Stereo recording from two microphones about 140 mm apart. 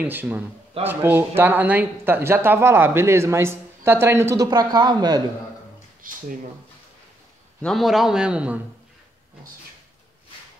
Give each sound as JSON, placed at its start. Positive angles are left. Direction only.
{"t": 0.0, "sound": "speech", "side_deg": -15}
{"t": 6.0, "sound": "speech", "side_deg": -85}
{"t": 7.6, "sound": "a man's voice", "side_deg": 0}